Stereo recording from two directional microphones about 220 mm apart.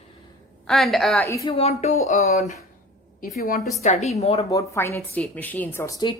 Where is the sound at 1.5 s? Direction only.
30° left (ahead or behind).